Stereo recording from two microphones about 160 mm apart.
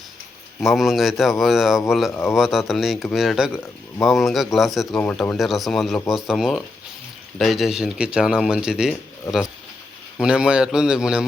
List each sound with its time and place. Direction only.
0.6 s a man's voice: centre (ahead or behind)
9.3 s speech: 20° left (ahead or behind)
10.2 s a man's voice: 5° right (ahead or behind)